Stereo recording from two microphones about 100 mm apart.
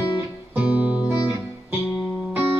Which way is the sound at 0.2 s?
20° right (ahead or behind).